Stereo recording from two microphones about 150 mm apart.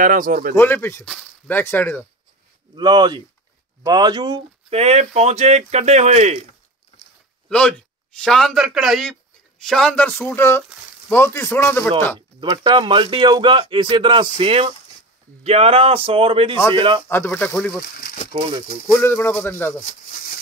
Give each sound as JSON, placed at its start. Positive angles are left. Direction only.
{"t": 0.0, "sound": "speech", "side_deg": -65}
{"t": 0.6, "sound": "a man's voice", "side_deg": 15}
{"t": 2.7, "sound": "speech", "side_deg": -30}
{"t": 4.6, "sound": "speech", "side_deg": -45}
{"t": 7.4, "sound": "a man's voice", "side_deg": 5}
{"t": 12.4, "sound": "speech", "side_deg": -30}
{"t": 17.1, "sound": "a man's voice", "side_deg": 15}
{"t": 17.9, "sound": "a sound", "side_deg": 90}
{"t": 18.3, "sound": "speech", "side_deg": -35}
{"t": 18.9, "sound": "a man's voice", "side_deg": 15}
{"t": 19.8, "sound": "a sound", "side_deg": 60}